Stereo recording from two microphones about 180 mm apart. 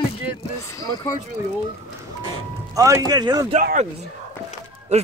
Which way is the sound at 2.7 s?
20° right (ahead or behind).